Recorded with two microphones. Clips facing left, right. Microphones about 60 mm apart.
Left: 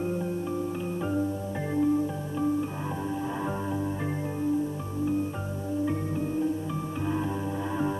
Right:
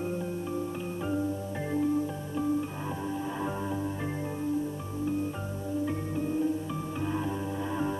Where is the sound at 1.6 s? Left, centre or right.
Centre.